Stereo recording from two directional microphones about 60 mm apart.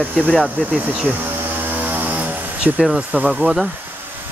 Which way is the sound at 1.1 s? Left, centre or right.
Right.